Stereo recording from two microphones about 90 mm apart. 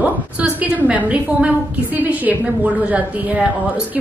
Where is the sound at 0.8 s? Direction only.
15° right (ahead or behind).